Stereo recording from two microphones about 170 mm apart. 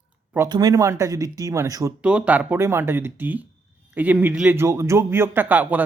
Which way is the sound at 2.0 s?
5° right (ahead or behind).